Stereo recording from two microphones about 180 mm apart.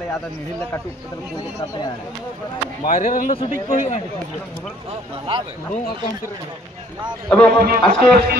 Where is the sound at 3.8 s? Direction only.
35° left (ahead or behind).